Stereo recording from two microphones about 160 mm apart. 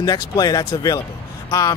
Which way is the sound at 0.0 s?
25° left (ahead or behind).